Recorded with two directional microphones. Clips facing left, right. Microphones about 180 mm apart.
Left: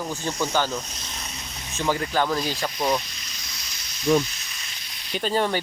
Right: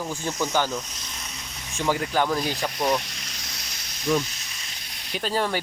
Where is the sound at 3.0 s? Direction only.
75° right (ahead or behind); by 3.7 s 60° right (ahead or behind).